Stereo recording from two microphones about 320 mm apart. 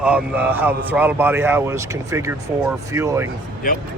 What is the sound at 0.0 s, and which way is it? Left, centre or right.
A man's voice, centre.